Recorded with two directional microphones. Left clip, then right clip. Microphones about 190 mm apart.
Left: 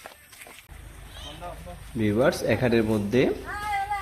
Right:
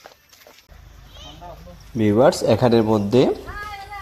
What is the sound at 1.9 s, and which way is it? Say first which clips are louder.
A man's voice: right 7 dB; 25° right (ahead or behind).